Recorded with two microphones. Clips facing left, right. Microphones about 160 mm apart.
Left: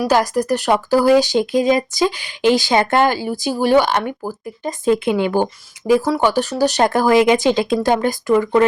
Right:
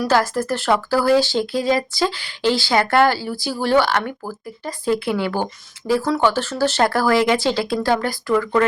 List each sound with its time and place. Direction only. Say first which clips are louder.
0.1 s speech: left 2 dB; 15° left (ahead or behind)